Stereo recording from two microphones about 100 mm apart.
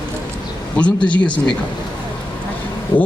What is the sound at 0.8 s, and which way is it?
Speech, 10° left (ahead or behind).